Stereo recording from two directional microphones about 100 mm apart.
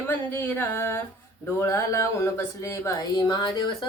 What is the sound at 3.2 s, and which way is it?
Speech, 45° left (ahead or behind).